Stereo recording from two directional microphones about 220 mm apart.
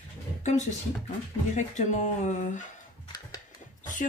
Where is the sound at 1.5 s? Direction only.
35° left (ahead or behind).